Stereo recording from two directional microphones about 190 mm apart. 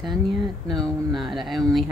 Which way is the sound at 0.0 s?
Centre (ahead or behind).